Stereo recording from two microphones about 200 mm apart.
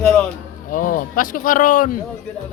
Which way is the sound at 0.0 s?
5° left (ahead or behind).